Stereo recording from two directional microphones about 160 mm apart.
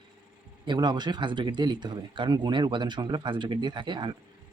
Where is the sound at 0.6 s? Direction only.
30° right (ahead or behind).